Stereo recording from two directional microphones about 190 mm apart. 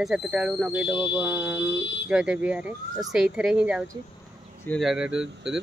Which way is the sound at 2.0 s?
5° right (ahead or behind).